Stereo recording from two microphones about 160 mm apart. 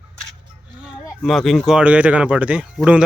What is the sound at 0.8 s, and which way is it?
Speech, 5° right (ahead or behind).